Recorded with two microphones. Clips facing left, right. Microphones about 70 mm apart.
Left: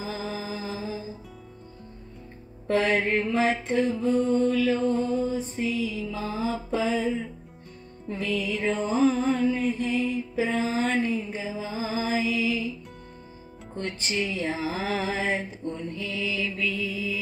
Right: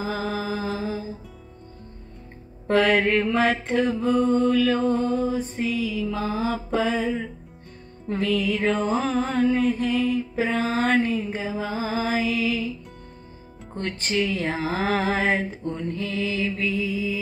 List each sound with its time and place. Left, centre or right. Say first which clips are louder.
0.0 s mantra: right 5 dB; right
2.7 s mantra: right 4 dB; right
8.1 s music: right 5 dB; right
13.7 s music: right 4 dB; right
16.4 s music: right 3 dB; right
16.8 s music: right 4 dB; centre